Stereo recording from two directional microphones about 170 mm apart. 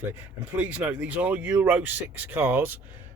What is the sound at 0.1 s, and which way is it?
Speech, 10° right (ahead or behind).